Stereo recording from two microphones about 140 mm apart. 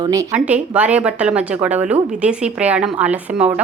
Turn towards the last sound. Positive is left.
turn(degrees=-10)  # may be behind; listen again after turning